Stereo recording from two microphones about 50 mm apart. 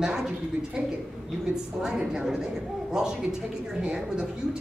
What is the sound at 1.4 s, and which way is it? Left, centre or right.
A woman's voice, centre.